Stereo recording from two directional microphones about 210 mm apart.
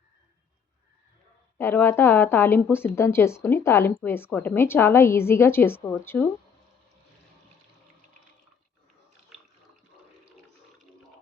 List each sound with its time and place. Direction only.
1.5 s a woman's voice: 10° left (ahead or behind)